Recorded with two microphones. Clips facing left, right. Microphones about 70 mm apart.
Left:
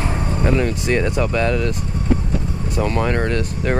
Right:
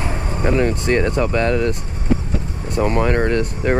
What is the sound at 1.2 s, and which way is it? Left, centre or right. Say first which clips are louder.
Speech: right 1 dB; centre.